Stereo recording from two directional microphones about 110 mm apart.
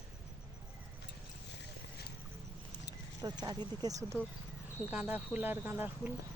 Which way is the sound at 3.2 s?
35° right (ahead or behind).